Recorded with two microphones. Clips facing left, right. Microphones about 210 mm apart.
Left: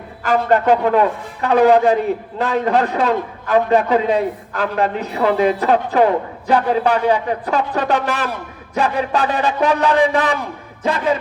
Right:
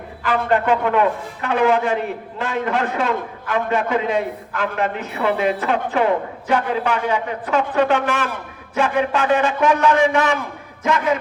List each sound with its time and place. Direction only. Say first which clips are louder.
0.2 s a man's voice: left 3 dB; 40° left (ahead or behind)